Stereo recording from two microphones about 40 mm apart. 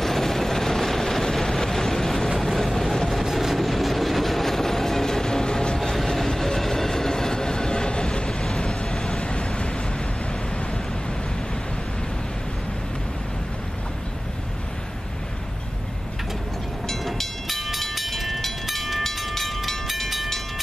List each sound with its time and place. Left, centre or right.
0.0 s vehicle: centre
5.8 s train: centre
8.5 s vehicle: left
16.8 s train: centre